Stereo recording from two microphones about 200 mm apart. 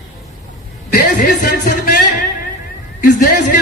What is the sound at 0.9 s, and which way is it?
A man's voice, 50° left (ahead or behind).